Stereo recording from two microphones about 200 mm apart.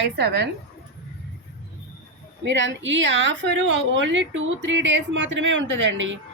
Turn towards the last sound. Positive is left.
turn(degrees=-70)  # may be behind; listen again after turning